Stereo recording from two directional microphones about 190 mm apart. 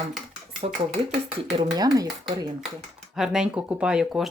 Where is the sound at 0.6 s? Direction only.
35° right (ahead or behind).